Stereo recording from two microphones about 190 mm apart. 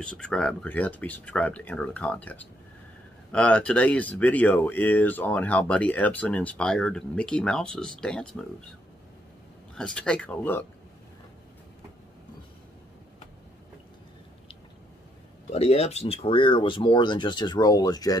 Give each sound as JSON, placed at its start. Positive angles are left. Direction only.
{"t": 0.0, "sound": "speech", "side_deg": 5}
{"t": 9.8, "sound": "speech", "side_deg": 5}
{"t": 15.5, "sound": "speech", "side_deg": 35}